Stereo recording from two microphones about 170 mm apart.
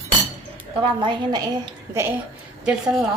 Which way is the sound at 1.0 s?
25° right (ahead or behind).